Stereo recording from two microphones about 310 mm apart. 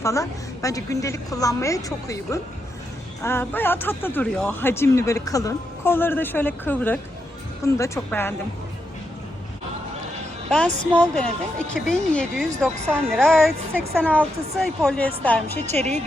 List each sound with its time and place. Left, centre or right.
0.0 s speech: centre
10.5 s a woman's voice: centre
15.6 s speech: right